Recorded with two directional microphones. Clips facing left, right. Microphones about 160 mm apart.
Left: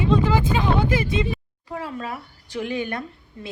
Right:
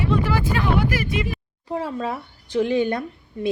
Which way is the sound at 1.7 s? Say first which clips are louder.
Right 5 dB; 25° right (ahead or behind).